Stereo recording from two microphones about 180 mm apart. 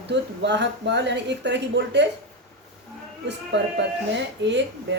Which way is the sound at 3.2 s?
75° right (ahead or behind).